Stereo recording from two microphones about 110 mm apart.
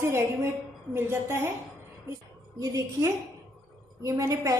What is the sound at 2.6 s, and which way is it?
A woman's voice, 30° right (ahead or behind).